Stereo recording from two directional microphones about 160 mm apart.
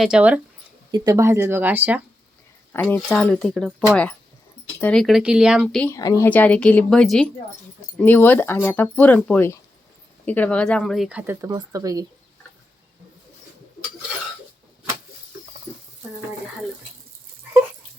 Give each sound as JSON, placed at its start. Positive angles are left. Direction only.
{"t": 0.0, "sound": "speech", "side_deg": -5}
{"t": 0.9, "sound": "speech", "side_deg": -25}
{"t": 2.9, "sound": "speech", "side_deg": 5}
{"t": 5.9, "sound": "speech", "side_deg": 20}
{"t": 6.2, "sound": "speech", "side_deg": 10}